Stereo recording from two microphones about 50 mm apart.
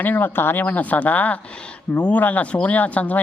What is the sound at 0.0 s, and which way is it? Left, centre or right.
Speech, left.